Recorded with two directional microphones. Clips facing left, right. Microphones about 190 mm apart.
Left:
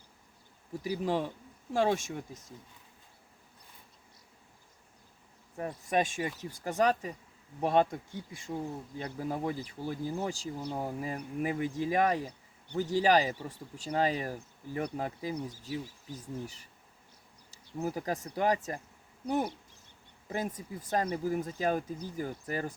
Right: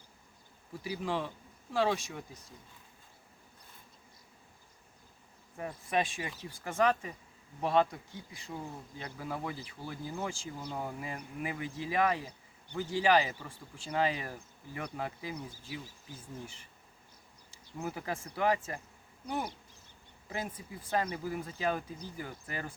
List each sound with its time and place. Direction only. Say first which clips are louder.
0.8 s speech: left 4 dB; 40° left (ahead or behind)
5.5 s speech: left 3 dB; 40° left (ahead or behind)
7.6 s speech: left 2 dB; 50° left (ahead or behind)